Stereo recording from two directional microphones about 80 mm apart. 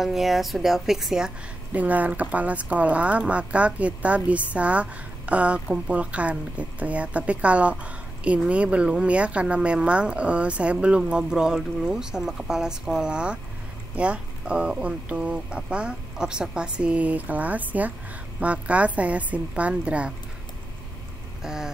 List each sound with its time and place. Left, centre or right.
0.0 s a woman's voice: centre
1.7 s speech: centre
21.4 s vehicle: centre